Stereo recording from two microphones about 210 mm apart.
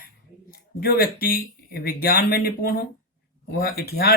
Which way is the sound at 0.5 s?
45° left (ahead or behind).